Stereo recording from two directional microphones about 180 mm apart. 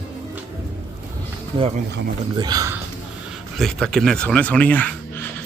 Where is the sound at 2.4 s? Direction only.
20° right (ahead or behind).